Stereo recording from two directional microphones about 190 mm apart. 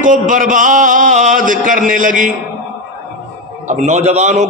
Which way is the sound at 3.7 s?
35° right (ahead or behind).